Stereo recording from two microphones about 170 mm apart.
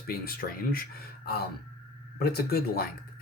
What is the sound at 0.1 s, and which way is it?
Speech, 60° left (ahead or behind).